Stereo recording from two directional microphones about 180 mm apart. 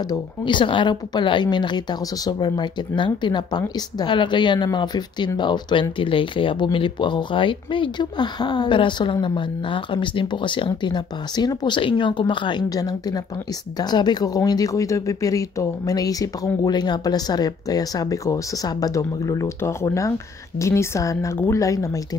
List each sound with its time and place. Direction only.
0.1 s a woman's voice: 25° left (ahead or behind)